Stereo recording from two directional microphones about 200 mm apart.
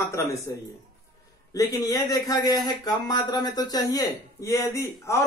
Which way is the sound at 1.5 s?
20° left (ahead or behind).